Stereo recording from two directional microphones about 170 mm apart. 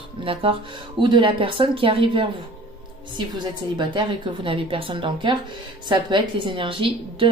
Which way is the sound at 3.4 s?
30° right (ahead or behind).